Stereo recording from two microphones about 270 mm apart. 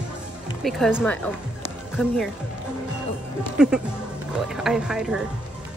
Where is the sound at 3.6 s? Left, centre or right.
Centre.